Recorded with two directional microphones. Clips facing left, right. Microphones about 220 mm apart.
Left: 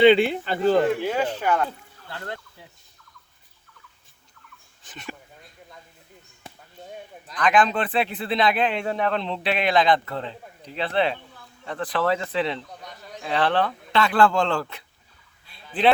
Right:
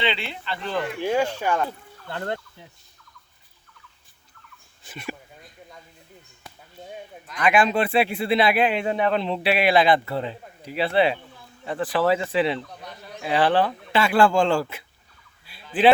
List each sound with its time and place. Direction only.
0.0 s speech: 50° left (ahead or behind)
1.0 s speech: 10° right (ahead or behind)
4.8 s dog: 10° right (ahead or behind)
7.3 s speech: 10° right (ahead or behind)
15.4 s fowl: 5° right (ahead or behind)